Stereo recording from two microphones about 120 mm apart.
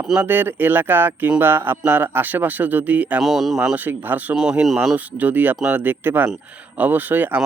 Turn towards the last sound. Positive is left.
turn(degrees=-15)  # may be behind; listen again after turning